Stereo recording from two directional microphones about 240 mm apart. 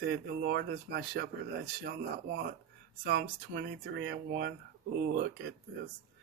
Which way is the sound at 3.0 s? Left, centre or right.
Right.